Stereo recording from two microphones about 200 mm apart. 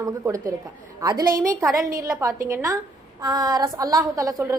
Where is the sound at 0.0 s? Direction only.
15° right (ahead or behind).